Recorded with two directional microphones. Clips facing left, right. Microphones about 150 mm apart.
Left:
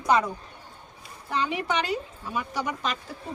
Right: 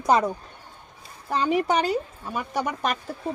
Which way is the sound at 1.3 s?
40° right (ahead or behind).